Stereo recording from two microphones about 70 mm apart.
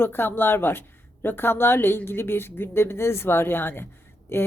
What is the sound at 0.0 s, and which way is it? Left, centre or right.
A woman's voice, left.